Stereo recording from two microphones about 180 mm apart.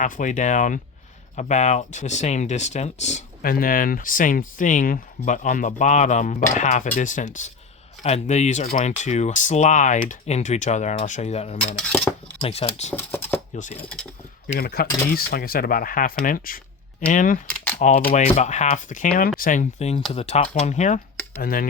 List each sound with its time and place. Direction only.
0.0 s speech: 45° left (ahead or behind)
11.8 s cutlery: 5° left (ahead or behind)
12.4 s speech: 35° left (ahead or behind)
12.9 s a sound: 10° left (ahead or behind)
13.7 s speech: 5° left (ahead or behind)
14.6 s speech: 60° left (ahead or behind)
17.5 s typing: 10° left (ahead or behind)
17.7 s speech: 45° left (ahead or behind)
21.4 s speech: 50° left (ahead or behind)